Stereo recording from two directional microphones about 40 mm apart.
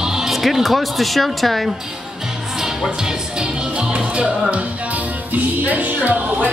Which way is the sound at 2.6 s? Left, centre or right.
Centre.